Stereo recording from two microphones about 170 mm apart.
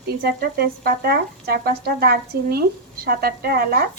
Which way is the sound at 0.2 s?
65° right (ahead or behind).